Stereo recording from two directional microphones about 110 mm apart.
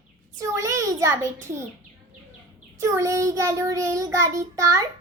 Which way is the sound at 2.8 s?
30° right (ahead or behind).